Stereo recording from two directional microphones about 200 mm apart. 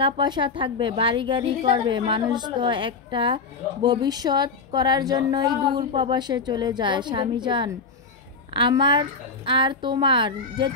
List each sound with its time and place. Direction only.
0.0 s a woman's voice: 25° right (ahead or behind)